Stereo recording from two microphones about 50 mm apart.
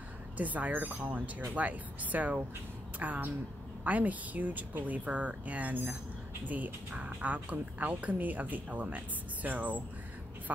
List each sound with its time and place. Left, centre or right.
0.4 s a woman's voice: right